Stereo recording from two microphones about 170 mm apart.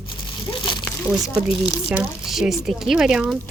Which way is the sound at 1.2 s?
5° right (ahead or behind).